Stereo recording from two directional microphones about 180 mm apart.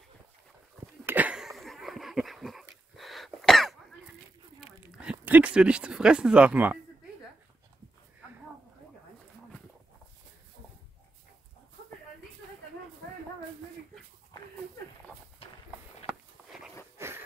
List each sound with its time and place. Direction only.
1.0 s dog: 10° right (ahead or behind)
4.6 s speech: 5° right (ahead or behind)
15.4 s walk: 30° left (ahead or behind)
16.1 s walk: centre (ahead or behind)
17.0 s a sound: 15° right (ahead or behind)